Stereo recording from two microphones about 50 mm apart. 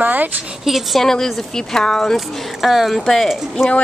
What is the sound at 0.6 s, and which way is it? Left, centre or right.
Speech, centre.